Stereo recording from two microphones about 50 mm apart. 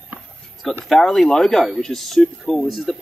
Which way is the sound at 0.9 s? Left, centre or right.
Centre.